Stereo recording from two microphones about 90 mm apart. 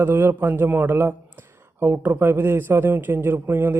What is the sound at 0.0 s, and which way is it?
Speech, 25° right (ahead or behind).